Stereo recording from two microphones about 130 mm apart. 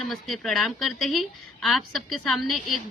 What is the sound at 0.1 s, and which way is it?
A woman's voice, centre (ahead or behind).